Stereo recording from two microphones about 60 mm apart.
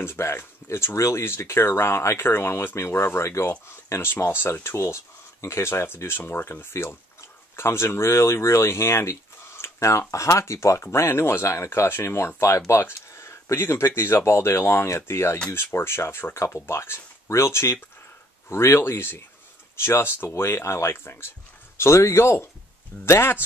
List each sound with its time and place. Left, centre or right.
0.0 s speech: left